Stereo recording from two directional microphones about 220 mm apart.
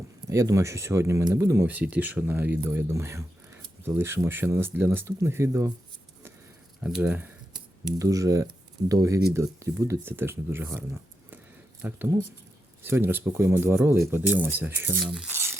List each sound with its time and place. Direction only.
0.3 s speech: 15° right (ahead or behind)
6.8 s speech: 5° right (ahead or behind)